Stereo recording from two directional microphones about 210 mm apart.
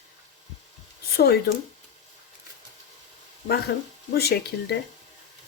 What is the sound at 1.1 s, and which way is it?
Speech, 50° left (ahead or behind).